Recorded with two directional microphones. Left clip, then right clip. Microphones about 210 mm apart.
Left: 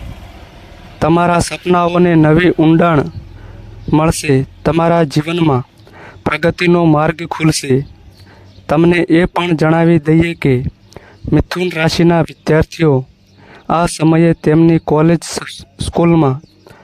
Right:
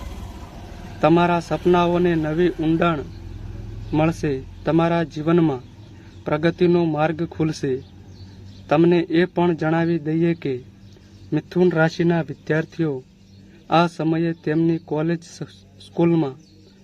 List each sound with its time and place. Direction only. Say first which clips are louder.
1.0 s speech: left 5 dB; 50° left (ahead or behind)